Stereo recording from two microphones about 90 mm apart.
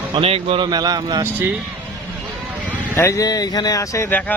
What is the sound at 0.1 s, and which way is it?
Speech, 90° right.